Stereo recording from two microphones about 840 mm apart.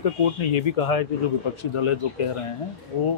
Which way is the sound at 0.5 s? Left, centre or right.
Left.